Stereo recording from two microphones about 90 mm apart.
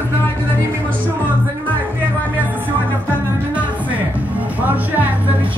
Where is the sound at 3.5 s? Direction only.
15° right (ahead or behind).